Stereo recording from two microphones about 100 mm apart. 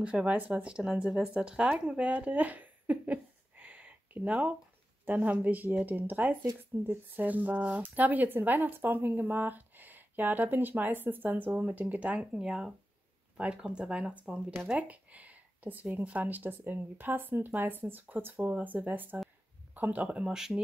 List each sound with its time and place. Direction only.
0.0 s speech: 15° right (ahead or behind)